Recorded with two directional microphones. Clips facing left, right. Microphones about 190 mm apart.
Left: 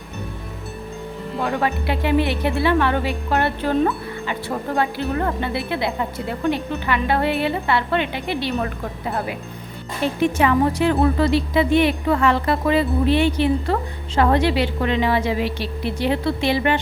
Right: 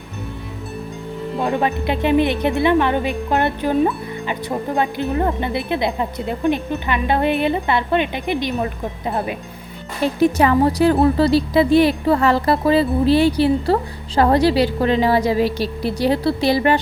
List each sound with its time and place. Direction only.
1.4 s a woman's voice: 20° right (ahead or behind)
10.2 s speech: 35° right (ahead or behind)